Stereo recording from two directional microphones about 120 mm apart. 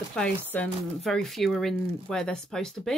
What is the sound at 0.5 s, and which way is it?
Speech, 15° left (ahead or behind).